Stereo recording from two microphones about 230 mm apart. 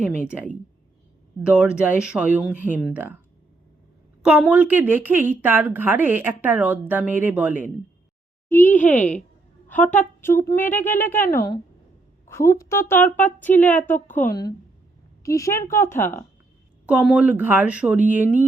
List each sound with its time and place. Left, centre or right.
0.3 s a woman's voice: centre
4.2 s a woman's voice: centre
8.4 s speech: centre
8.7 s speech: left
9.6 s a woman's voice: centre
16.8 s a woman's voice: centre